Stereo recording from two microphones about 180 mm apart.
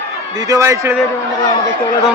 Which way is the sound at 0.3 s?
20° right (ahead or behind).